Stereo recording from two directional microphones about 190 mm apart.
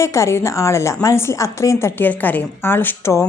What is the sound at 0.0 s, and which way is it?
Speech, 15° left (ahead or behind).